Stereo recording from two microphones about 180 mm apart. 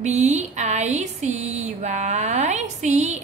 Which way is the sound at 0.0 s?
40° right (ahead or behind).